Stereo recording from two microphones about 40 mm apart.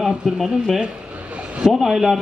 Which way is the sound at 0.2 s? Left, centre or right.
Centre.